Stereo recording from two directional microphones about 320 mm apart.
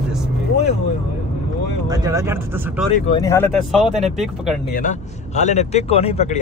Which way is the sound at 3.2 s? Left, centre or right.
Centre.